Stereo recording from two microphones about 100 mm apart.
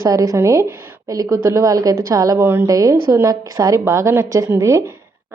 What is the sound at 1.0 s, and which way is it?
A woman's voice, 35° right (ahead or behind).